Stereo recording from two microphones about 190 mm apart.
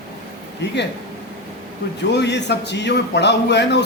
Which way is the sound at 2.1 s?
65° left (ahead or behind).